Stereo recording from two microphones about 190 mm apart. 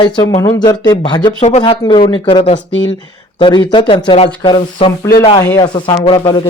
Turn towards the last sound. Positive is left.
turn(degrees=25)  # may be behind; listen again after turning